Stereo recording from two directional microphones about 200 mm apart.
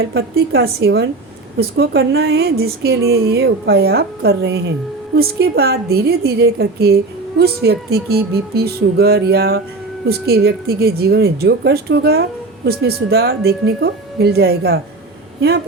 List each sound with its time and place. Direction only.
0.0 s a woman's voice: 55° right (ahead or behind)